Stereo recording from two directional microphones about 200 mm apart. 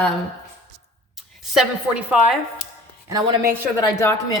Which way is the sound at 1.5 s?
5° right (ahead or behind).